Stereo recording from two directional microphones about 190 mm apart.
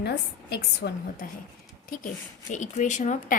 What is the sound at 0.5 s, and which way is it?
Speech, 60° left (ahead or behind).